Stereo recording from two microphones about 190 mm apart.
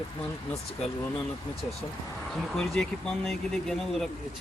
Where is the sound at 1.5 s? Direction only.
25° left (ahead or behind).